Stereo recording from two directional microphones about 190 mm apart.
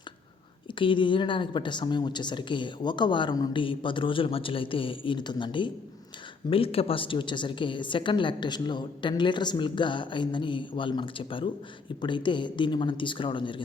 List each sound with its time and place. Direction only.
0.8 s a woman's voice: 25° left (ahead or behind)